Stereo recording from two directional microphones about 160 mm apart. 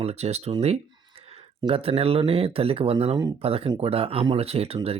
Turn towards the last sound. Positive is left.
turn(degrees=-40)  # may be behind; listen again after turning